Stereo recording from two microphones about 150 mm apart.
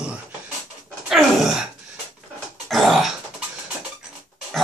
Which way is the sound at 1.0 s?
5° right (ahead or behind).